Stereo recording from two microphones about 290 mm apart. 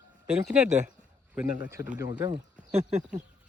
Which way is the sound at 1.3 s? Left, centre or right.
Centre.